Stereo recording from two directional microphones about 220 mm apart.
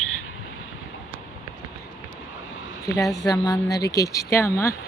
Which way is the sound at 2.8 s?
15° left (ahead or behind).